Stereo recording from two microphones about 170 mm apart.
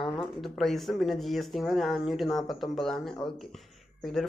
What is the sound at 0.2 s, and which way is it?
Speech, centre (ahead or behind).